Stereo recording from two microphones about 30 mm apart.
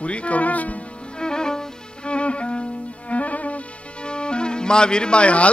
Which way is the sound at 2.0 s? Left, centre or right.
Left.